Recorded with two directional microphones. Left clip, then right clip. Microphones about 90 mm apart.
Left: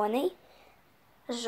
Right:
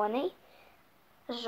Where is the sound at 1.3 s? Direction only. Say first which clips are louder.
Left 2 dB; 40° left (ahead or behind).